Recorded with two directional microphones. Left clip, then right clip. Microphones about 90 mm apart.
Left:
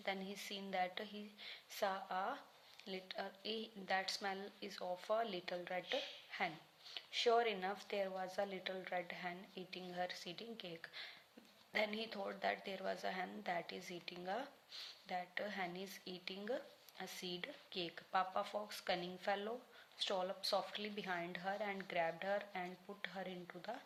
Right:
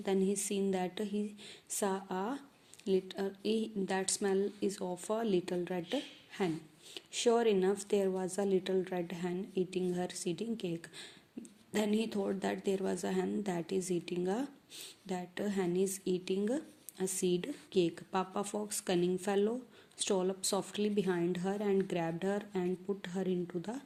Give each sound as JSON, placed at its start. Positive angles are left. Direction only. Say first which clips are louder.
{"t": 0.0, "sound": "a woman's voice", "louder": "right 11 dB", "side_deg": -40}